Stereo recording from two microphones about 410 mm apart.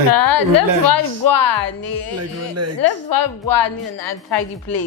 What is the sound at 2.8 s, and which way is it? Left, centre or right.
A woman's voice, left.